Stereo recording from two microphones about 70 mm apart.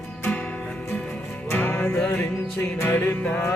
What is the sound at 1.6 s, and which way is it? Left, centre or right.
Music, left.